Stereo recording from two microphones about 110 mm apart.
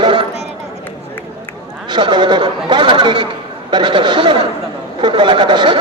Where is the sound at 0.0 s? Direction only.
50° right (ahead or behind).